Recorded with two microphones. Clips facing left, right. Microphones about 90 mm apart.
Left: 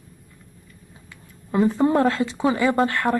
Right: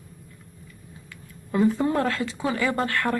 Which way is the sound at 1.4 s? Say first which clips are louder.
Left 3 dB; 25° left (ahead or behind).